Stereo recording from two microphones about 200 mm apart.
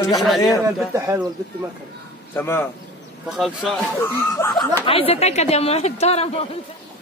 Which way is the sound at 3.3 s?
Centre (ahead or behind).